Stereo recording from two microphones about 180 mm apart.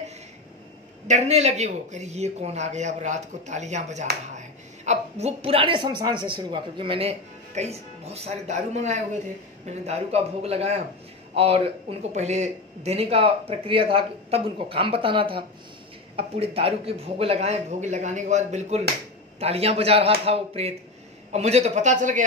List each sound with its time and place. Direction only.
1.0 s a woman's voice: 40° right (ahead or behind)